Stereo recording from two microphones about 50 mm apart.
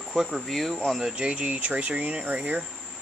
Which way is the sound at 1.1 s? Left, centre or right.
Right.